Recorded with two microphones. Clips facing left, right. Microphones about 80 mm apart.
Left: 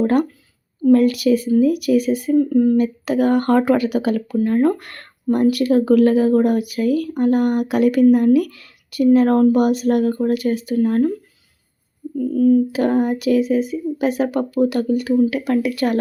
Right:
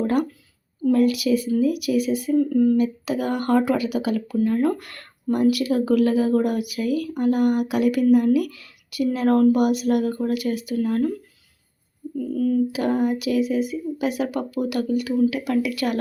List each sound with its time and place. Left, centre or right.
0.0 s speech: left
12.3 s speech: left
12.7 s speech: left